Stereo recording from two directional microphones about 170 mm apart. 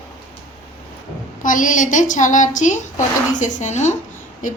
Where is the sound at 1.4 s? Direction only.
50° left (ahead or behind).